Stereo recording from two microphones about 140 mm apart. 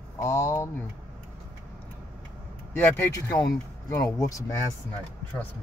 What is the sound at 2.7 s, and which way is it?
Speech, 15° left (ahead or behind).